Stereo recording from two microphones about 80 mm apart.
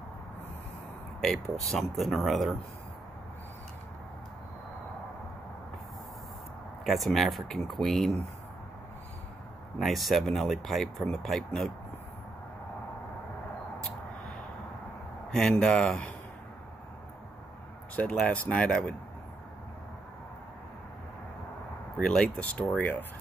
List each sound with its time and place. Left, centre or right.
1.2 s speech: centre
6.8 s speech: centre
9.8 s speech: centre
15.3 s speech: centre
17.9 s speech: centre
21.9 s speech: centre